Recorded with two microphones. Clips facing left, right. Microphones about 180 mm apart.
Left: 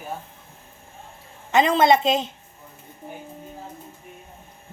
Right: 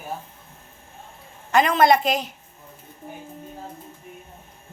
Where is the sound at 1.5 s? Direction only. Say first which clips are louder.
Even; 25° left (ahead or behind).